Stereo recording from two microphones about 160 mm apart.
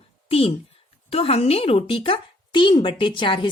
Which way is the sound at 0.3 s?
35° left (ahead or behind).